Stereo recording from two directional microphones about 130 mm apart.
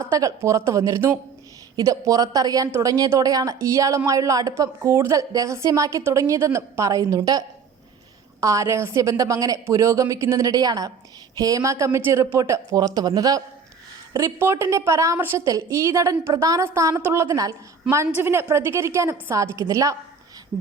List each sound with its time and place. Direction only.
0.0 s a woman's voice: 25° right (ahead or behind)